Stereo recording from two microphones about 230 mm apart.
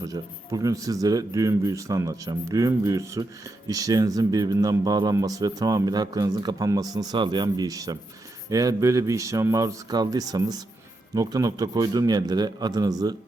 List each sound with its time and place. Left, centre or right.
0.0 s speech: centre